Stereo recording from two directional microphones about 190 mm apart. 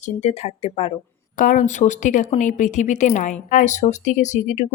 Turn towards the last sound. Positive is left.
turn(degrees=40)  # may be behind; listen again after turning